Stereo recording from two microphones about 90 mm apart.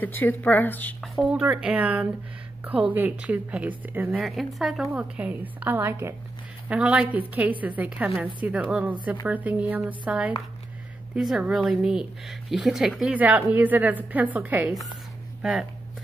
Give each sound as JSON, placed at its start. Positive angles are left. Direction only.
{"t": 0.0, "sound": "speech", "side_deg": 20}
{"t": 1.0, "sound": "speech", "side_deg": 0}
{"t": 4.1, "sound": "speech", "side_deg": 0}
{"t": 4.9, "sound": "a woman's voice", "side_deg": -15}
{"t": 6.7, "sound": "speech", "side_deg": -15}
{"t": 11.1, "sound": "speech", "side_deg": -5}
{"t": 13.1, "sound": "a woman's voice", "side_deg": -15}